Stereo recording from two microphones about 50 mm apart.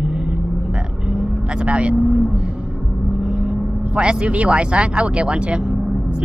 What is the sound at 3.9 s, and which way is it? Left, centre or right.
Speech, right.